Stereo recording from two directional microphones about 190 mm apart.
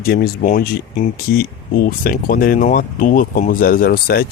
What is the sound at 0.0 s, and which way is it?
Speech, 50° left (ahead or behind).